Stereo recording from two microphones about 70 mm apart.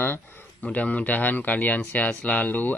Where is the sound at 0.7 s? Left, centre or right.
Left.